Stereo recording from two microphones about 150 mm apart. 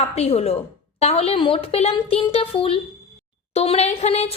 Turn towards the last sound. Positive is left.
turn(degrees=45)  # may be behind; listen again after turning